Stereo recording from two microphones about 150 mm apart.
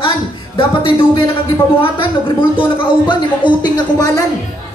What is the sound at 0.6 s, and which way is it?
Speech, 35° left (ahead or behind).